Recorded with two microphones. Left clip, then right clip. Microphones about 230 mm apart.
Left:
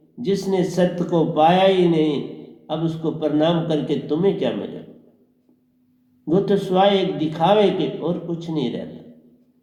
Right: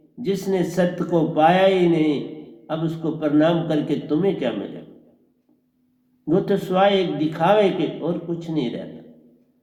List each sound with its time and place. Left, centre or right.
0.3 s a man's voice: right
6.2 s a man's voice: right